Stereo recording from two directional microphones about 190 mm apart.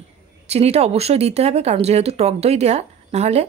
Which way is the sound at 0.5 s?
35° right (ahead or behind).